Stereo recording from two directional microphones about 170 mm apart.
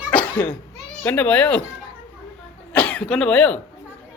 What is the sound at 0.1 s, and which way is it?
Cough, 10° left (ahead or behind).